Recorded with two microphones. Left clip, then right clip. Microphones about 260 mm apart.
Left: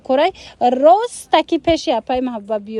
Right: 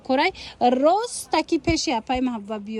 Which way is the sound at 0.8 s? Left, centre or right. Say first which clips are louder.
Left 8 dB; right.